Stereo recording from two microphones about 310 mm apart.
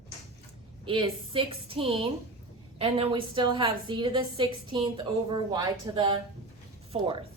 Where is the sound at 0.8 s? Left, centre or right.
Centre.